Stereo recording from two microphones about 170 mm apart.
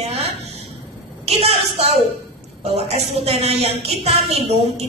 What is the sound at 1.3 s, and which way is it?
Speech, 40° right (ahead or behind).